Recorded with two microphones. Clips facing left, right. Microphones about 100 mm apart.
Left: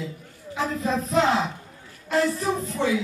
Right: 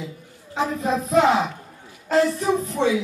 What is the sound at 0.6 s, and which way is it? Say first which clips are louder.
Speech: right 3 dB; 20° right (ahead or behind).